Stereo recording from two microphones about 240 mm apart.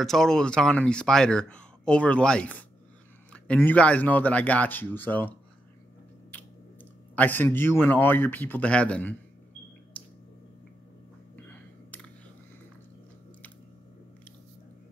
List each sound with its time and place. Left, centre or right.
0.0 s speech: centre
7.2 s speech: centre
9.9 s a sound: centre
11.3 s music: centre